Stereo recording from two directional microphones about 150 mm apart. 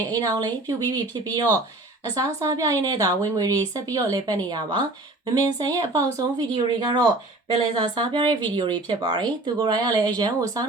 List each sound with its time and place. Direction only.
0.1 s speech: 25° right (ahead or behind)